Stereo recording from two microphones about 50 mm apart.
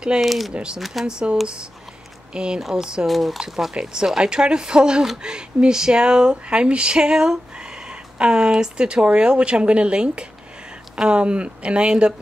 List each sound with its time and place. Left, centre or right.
0.2 s speech: centre
1.0 s speech: centre
3.1 s speech: centre; by 12.1 s right